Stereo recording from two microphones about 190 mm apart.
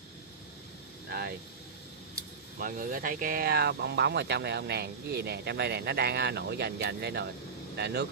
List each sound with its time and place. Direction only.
1.0 s speech: 55° right (ahead or behind)
2.6 s speech: 45° right (ahead or behind)